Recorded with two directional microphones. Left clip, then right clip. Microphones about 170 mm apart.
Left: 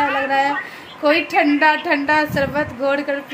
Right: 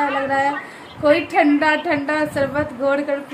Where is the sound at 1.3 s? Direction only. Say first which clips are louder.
Left 1 dB; centre (ahead or behind).